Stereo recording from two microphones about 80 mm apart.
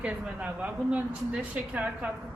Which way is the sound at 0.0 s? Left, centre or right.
Centre.